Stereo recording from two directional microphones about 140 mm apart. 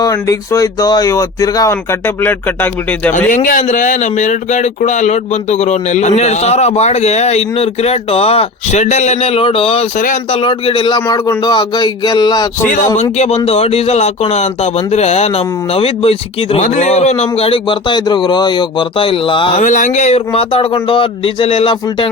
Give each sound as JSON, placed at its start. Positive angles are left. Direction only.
{"t": 0.0, "sound": "speech", "side_deg": 25}
{"t": 3.2, "sound": "speech", "side_deg": 70}
{"t": 12.6, "sound": "speech", "side_deg": 65}
{"t": 13.0, "sound": "speech", "side_deg": 55}
{"t": 19.5, "sound": "speech", "side_deg": 65}